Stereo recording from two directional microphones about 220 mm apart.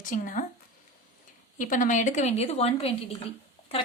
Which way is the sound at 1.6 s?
35° left (ahead or behind).